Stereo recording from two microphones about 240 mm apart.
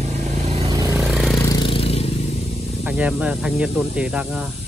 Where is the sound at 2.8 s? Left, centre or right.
Centre.